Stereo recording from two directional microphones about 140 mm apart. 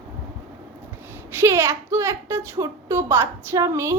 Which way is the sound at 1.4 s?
20° right (ahead or behind).